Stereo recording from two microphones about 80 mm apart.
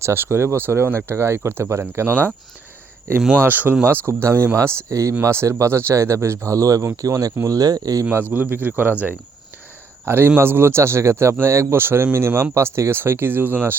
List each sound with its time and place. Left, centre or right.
0.0 s speech: right
3.3 s speech: right
8.1 s speech: right